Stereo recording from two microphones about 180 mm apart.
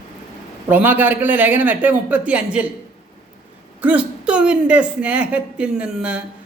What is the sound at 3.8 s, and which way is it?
Speech, 5° right (ahead or behind).